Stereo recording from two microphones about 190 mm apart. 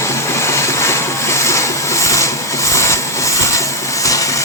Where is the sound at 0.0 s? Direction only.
15° left (ahead or behind).